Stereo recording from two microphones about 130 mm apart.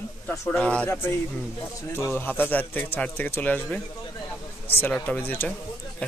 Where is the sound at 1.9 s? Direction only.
20° left (ahead or behind).